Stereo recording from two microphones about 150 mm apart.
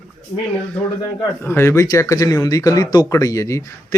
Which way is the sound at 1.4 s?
15° left (ahead or behind).